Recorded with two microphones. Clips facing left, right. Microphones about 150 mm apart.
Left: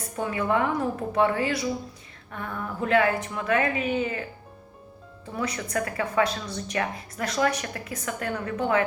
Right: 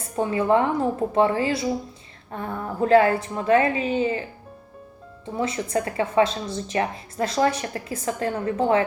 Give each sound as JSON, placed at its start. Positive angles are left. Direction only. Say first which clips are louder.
{"t": 0.2, "sound": "a woman's voice", "louder": "right 5 dB", "side_deg": -30}